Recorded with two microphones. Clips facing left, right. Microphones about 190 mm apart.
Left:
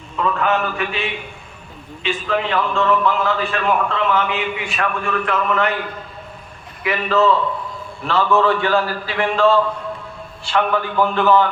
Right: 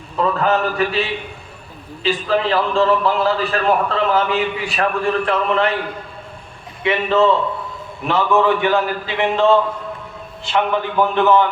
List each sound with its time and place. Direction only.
0.2 s a man's voice: 35° right (ahead or behind)
6.8 s a man's voice: 25° right (ahead or behind)